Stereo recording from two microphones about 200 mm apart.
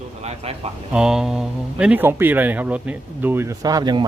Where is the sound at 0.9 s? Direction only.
5° right (ahead or behind).